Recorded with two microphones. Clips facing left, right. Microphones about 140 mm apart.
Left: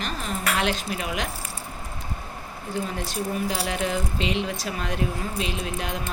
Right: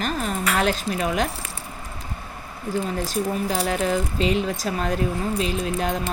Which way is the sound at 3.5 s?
40° right (ahead or behind).